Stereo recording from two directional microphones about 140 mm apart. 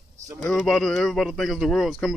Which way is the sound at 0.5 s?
Centre (ahead or behind).